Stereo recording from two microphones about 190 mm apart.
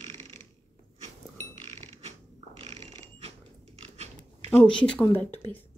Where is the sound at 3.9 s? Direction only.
35° right (ahead or behind).